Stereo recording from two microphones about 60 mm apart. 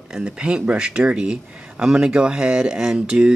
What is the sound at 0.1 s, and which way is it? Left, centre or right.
Speech, centre.